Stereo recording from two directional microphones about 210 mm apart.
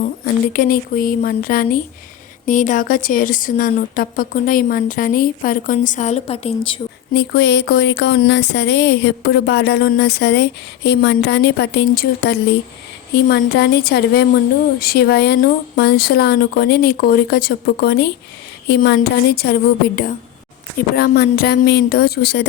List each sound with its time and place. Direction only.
0.5 s a woman's voice: 40° left (ahead or behind)
7.1 s speech: 55° left (ahead or behind)
20.9 s speech: 45° left (ahead or behind)